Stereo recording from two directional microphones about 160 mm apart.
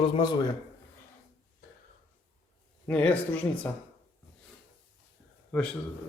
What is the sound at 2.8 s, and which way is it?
Speech, 10° left (ahead or behind).